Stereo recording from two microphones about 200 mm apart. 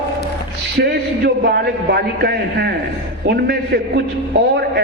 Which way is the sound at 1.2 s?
55° right (ahead or behind).